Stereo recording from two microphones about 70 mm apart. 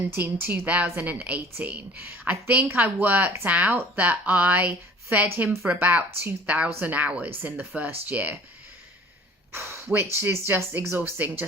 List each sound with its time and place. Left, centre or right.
0.1 s a woman's voice: right
9.5 s a woman's voice: right